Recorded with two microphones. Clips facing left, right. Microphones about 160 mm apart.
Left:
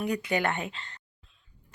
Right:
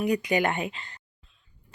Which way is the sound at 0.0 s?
15° right (ahead or behind).